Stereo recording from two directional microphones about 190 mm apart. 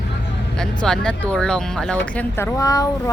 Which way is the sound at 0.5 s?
5° left (ahead or behind).